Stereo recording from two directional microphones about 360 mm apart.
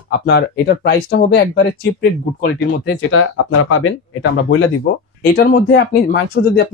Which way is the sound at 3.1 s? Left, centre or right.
Left.